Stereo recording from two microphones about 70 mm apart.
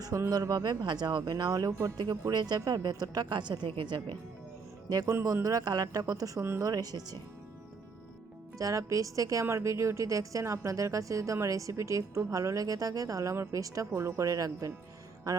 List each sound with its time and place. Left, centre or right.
0.3 s speech: right
2.3 s a woman's voice: right
2.6 s a woman's voice: right
5.0 s speech: right
6.4 s speech: right
6.7 s speech: right
8.5 s speech: right
13.9 s speech: right
14.3 s speech: right